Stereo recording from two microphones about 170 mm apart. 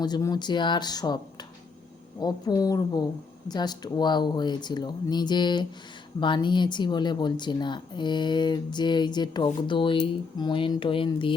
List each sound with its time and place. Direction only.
0.0 s speech: 25° left (ahead or behind)